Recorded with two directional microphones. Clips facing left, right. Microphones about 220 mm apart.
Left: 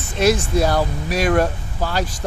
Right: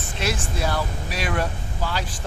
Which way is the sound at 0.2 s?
40° left (ahead or behind).